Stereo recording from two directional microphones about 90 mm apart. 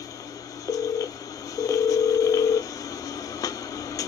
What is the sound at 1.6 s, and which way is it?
Telephone, 40° left (ahead or behind).